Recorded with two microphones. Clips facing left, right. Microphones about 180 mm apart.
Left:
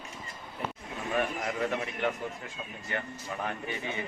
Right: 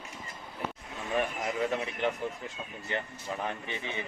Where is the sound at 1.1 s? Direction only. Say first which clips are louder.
Even; 15° right (ahead or behind).